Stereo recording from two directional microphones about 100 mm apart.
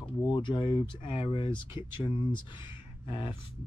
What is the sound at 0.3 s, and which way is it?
Speech, 55° left (ahead or behind).